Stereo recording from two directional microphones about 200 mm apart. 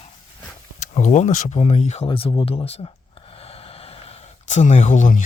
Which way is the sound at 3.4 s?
30° left (ahead or behind).